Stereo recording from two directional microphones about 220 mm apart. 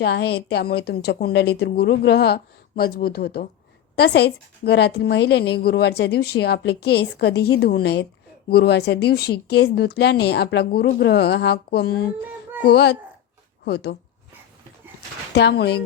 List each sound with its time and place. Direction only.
0.0 s a woman's voice: 50° left (ahead or behind)
15.4 s a woman's voice: 50° left (ahead or behind)